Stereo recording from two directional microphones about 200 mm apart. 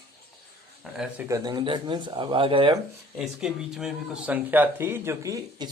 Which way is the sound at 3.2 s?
5° right (ahead or behind).